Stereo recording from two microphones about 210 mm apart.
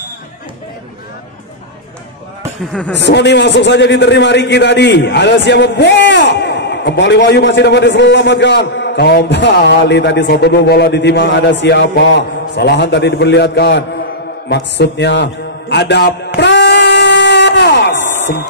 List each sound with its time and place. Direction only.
2.9 s a man's voice: 55° left (ahead or behind)
15.7 s music: 55° left (ahead or behind)
16.3 s a sound: 55° left (ahead or behind)